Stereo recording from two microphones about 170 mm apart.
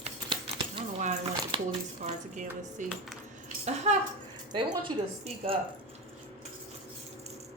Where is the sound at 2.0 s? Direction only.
45° right (ahead or behind).